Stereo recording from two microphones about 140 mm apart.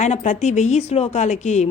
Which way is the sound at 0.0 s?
55° left (ahead or behind).